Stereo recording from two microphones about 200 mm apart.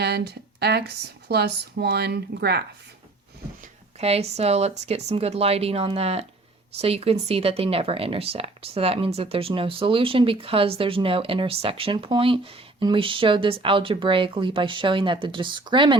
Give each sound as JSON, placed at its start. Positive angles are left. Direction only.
{"t": 0.0, "sound": "speech", "side_deg": -55}
{"t": 3.6, "sound": "speech", "side_deg": -30}